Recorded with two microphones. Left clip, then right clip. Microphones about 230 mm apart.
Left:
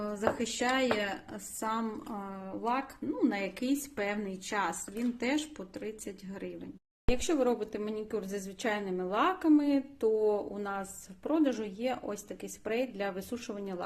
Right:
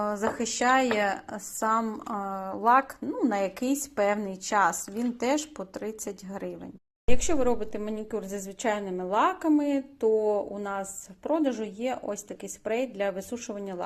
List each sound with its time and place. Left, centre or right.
0.0 s speech: centre
7.1 s a woman's voice: centre